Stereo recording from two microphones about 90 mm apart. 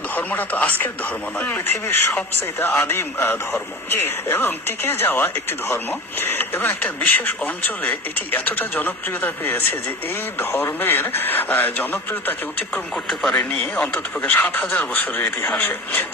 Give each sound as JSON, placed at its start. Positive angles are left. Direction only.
{"t": 0.1, "sound": "speech", "side_deg": 20}
{"t": 13.1, "sound": "speech", "side_deg": 10}